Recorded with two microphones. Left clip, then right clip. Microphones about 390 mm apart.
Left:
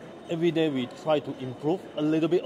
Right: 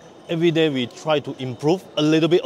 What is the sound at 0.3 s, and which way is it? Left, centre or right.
Speech, right.